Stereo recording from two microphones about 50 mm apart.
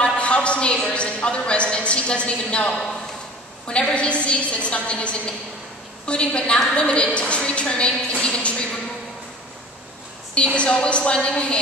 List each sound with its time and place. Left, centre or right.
0.0 s a man's voice: left
10.3 s a man's voice: left